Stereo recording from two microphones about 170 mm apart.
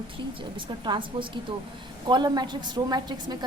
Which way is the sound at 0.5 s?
30° right (ahead or behind).